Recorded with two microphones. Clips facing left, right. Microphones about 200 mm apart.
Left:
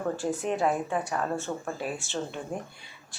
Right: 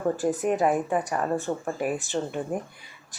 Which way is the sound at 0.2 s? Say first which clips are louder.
Right 4 dB; 15° right (ahead or behind).